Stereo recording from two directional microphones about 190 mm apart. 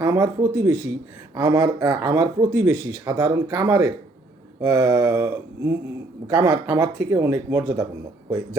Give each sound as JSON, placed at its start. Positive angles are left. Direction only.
{"t": 0.0, "sound": "speech", "side_deg": -15}